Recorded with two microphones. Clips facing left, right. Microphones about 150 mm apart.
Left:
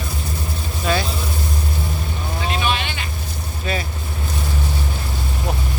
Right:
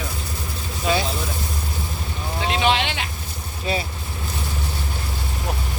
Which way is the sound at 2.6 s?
85° right.